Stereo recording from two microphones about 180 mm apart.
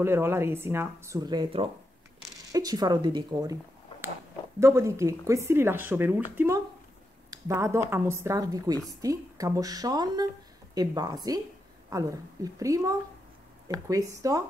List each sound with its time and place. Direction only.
0.0 s a woman's voice: 15° right (ahead or behind)
4.6 s a woman's voice: 15° right (ahead or behind)